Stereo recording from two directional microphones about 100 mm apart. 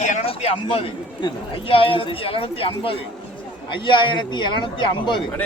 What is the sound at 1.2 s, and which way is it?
Speech, 50° left (ahead or behind).